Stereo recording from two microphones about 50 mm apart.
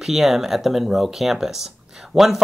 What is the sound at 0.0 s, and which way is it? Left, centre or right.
Speech, centre.